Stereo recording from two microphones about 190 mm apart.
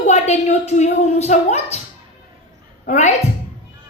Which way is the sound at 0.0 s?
35° left (ahead or behind).